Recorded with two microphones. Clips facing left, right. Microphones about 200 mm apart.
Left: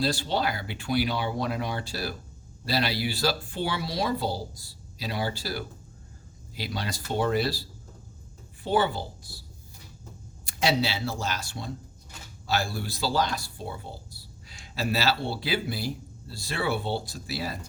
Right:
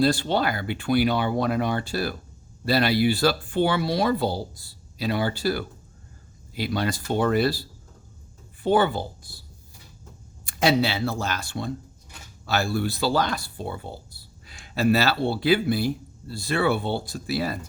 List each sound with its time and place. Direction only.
0.0 s speech: 55° right (ahead or behind)
8.6 s speech: 55° right (ahead or behind)
10.4 s speech: 55° right (ahead or behind)